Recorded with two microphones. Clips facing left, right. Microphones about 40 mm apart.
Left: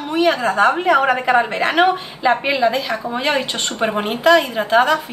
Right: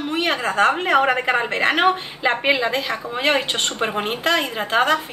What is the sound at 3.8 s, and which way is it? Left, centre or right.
Speech, centre.